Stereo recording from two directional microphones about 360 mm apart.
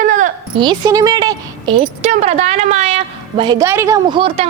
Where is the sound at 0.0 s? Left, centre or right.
Right.